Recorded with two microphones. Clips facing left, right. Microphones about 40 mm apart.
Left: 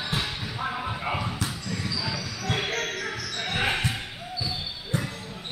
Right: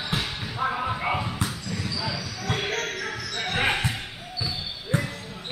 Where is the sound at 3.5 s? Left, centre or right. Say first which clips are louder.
Right 2 dB; centre.